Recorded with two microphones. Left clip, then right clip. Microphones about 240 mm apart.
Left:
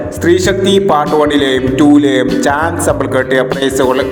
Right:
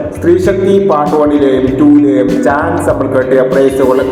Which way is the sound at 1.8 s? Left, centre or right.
Left.